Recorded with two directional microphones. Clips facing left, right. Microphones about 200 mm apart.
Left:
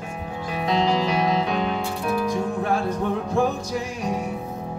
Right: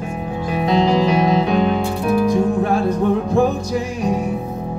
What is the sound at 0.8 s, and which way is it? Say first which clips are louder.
Music: right 6 dB; 15° right (ahead or behind).